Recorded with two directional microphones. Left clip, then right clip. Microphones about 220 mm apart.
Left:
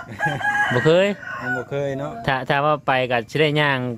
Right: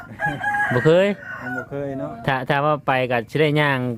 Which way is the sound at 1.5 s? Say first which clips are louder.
Left 4 dB; 45° left (ahead or behind).